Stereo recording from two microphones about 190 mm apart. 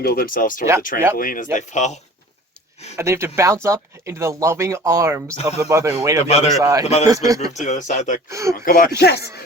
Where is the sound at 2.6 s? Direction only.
5° left (ahead or behind).